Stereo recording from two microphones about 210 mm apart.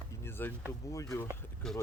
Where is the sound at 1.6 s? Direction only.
Centre (ahead or behind).